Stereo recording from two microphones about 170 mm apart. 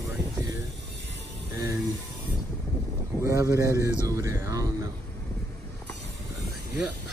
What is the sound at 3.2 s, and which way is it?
Speech, 20° right (ahead or behind).